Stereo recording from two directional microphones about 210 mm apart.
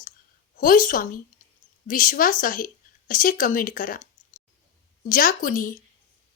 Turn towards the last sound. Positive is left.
turn(degrees=40)  # may be behind; listen again after turning